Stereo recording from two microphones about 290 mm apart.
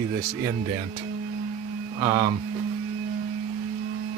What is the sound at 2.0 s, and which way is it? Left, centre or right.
Speech, centre.